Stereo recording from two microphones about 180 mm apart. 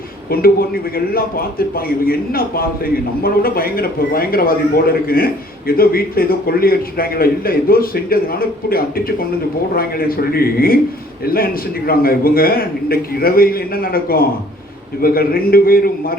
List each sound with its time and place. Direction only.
0.3 s a man's voice: 55° left (ahead or behind)
11.9 s a man's voice: 55° left (ahead or behind)